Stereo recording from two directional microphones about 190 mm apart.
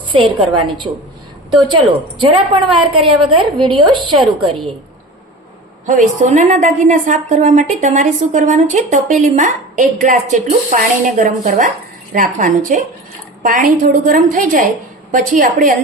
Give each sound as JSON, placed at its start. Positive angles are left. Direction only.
{"t": 0.1, "sound": "a woman's voice", "side_deg": -30}
{"t": 2.2, "sound": "a woman's voice", "side_deg": -25}
{"t": 5.8, "sound": "a woman's voice", "side_deg": -40}